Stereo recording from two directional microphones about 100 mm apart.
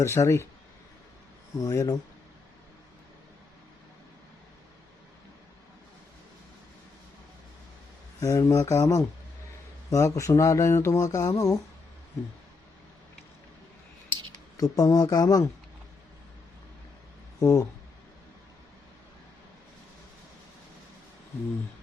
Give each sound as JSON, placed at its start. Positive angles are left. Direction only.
{"t": 0.0, "sound": "speech", "side_deg": 30}
{"t": 1.5, "sound": "speech", "side_deg": 35}
{"t": 8.2, "sound": "speech", "side_deg": 35}
{"t": 14.6, "sound": "speech", "side_deg": 40}
{"t": 17.4, "sound": "speech", "side_deg": 35}